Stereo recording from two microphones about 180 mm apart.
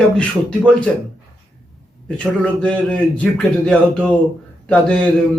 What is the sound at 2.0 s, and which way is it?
A man's voice, 5° left (ahead or behind).